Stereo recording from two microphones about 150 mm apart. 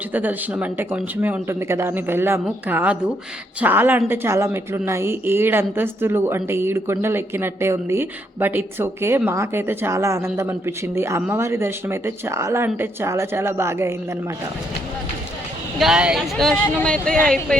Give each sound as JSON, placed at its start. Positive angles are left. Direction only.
{"t": 0.1, "sound": "a woman's voice", "side_deg": -10}
{"t": 15.8, "sound": "speech", "side_deg": -5}